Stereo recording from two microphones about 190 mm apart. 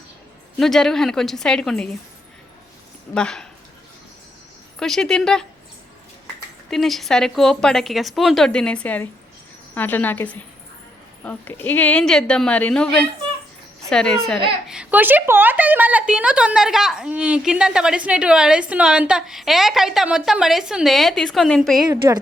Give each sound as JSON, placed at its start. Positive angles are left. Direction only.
{"t": 0.6, "sound": "a woman's voice", "side_deg": 0}
{"t": 3.2, "sound": "a woman's voice", "side_deg": 5}
{"t": 4.8, "sound": "a woman's voice", "side_deg": 0}
{"t": 6.7, "sound": "a woman's voice", "side_deg": 0}
{"t": 22.0, "sound": "speech", "side_deg": -15}